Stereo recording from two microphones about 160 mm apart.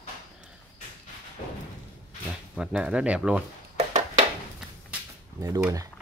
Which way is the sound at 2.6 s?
5° right (ahead or behind).